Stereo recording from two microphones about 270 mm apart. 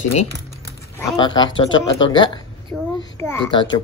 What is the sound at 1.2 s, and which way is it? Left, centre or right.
Speech, centre.